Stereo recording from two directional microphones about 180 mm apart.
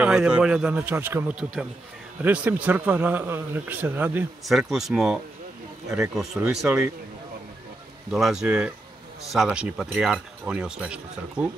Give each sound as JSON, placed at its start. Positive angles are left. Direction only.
{"t": 0.0, "sound": "a man's voice", "side_deg": -5}
{"t": 5.9, "sound": "a man's voice", "side_deg": -15}
{"t": 6.1, "sound": "speech", "side_deg": 0}
{"t": 8.1, "sound": "speech", "side_deg": -5}